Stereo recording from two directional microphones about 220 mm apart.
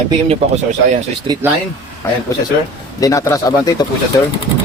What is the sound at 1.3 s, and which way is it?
Speech, 20° right (ahead or behind).